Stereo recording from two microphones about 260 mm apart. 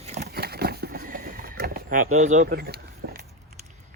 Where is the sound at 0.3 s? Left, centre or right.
Right.